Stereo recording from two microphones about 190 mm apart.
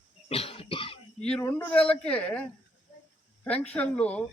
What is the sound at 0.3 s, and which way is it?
Cough, 30° left (ahead or behind).